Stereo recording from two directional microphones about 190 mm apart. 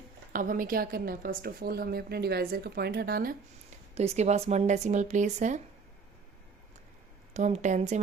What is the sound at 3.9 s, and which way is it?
A woman's voice, 35° right (ahead or behind).